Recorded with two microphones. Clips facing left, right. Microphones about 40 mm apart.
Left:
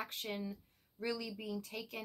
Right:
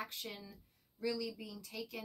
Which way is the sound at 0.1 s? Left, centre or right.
Left.